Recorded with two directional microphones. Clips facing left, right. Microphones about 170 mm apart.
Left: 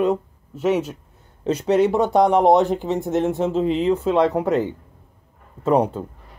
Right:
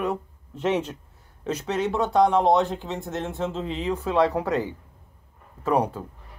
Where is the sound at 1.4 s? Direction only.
30° left (ahead or behind).